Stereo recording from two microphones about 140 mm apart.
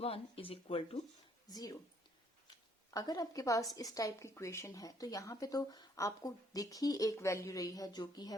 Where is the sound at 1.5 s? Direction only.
25° left (ahead or behind).